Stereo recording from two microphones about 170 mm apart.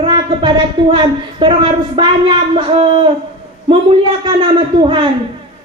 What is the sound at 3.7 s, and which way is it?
A man's voice, 30° right (ahead or behind).